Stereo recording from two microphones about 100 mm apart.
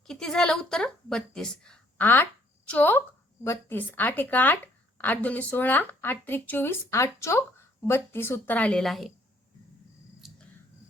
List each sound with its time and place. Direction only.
0.1 s a woman's voice: 5° left (ahead or behind)
2.0 s a woman's voice: 20° left (ahead or behind)
8.8 s a woman's voice: centre (ahead or behind)
10.2 s a sound: centre (ahead or behind)